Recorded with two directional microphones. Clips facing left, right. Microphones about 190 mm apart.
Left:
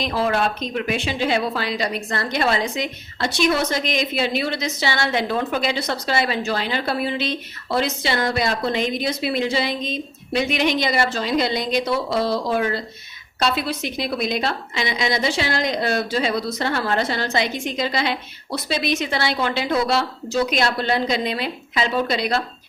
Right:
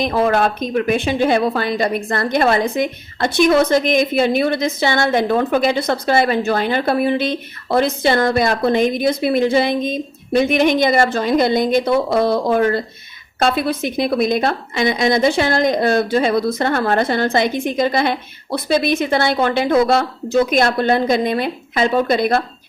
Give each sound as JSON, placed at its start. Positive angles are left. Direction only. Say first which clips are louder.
{"t": 0.0, "sound": "speech", "louder": "right 5 dB", "side_deg": -50}